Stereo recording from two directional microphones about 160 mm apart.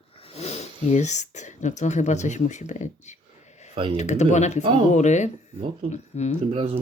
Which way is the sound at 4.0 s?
45° left (ahead or behind).